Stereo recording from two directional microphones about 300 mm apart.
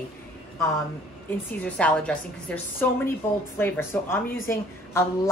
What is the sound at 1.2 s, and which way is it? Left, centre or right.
A woman's voice, centre.